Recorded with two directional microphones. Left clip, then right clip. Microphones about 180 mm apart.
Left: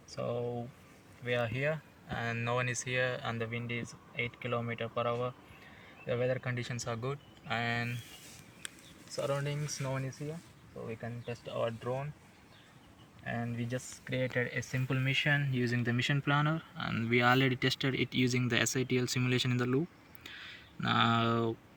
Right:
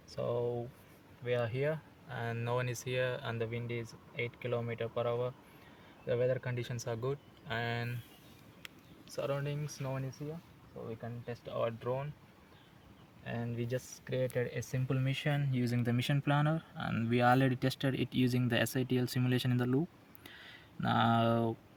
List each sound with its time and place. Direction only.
0.2 s speech: 10° right (ahead or behind)
1.2 s speech: 50° right (ahead or behind)
9.1 s speech: 10° left (ahead or behind)
11.0 s speech: 25° left (ahead or behind)
11.8 s speech: 5° right (ahead or behind)
13.2 s speech: 45° right (ahead or behind); by 19.8 s 65° right (ahead or behind)
20.2 s a sound: 65° right (ahead or behind)